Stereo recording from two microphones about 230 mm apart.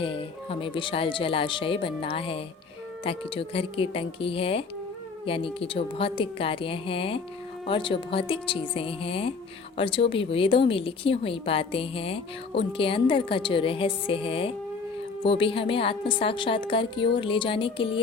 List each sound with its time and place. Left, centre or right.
0.0 s speech: left